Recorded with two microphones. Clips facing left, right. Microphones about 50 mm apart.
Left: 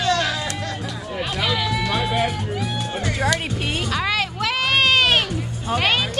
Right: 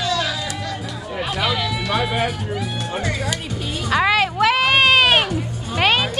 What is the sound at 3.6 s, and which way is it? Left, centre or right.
Speech, left.